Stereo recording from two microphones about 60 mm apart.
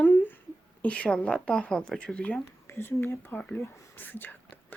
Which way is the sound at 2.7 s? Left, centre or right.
Left.